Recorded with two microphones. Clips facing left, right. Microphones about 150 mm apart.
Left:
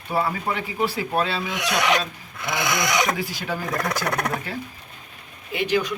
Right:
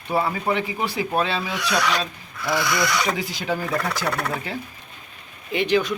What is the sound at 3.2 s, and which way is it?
Speech, 15° right (ahead or behind).